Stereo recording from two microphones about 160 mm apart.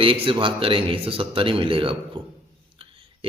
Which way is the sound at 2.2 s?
35° right (ahead or behind).